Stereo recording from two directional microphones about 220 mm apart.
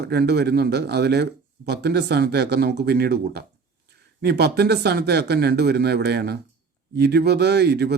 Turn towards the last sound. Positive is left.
turn(degrees=-50)  # may be behind; listen again after turning